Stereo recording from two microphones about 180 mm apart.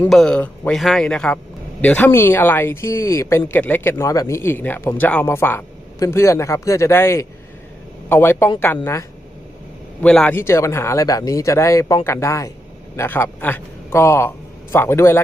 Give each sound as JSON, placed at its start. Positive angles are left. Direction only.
{"t": 0.1, "sound": "a man's voice", "side_deg": 5}